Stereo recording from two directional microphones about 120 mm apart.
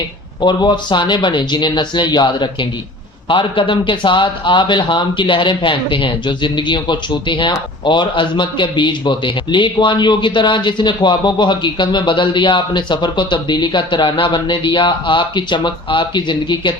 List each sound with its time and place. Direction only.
0.4 s a man's voice: 40° left (ahead or behind)